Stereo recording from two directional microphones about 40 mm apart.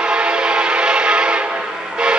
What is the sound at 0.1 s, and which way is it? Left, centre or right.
Train, right.